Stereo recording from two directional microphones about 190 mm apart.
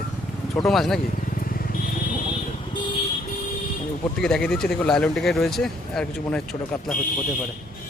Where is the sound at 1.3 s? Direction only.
50° left (ahead or behind).